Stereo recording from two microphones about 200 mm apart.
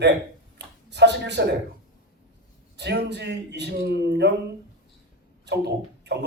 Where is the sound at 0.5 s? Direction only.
60° right (ahead or behind).